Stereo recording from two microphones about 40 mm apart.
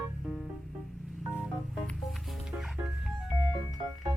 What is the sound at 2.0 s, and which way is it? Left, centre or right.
Music, centre.